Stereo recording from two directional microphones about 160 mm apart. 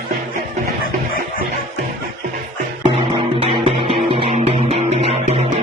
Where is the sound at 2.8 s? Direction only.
35° right (ahead or behind).